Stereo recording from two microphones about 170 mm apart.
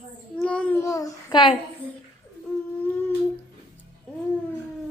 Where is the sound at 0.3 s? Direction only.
5° left (ahead or behind); by 1.5 s 30° left (ahead or behind).